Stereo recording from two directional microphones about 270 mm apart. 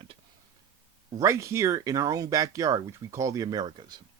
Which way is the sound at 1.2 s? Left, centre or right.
Centre.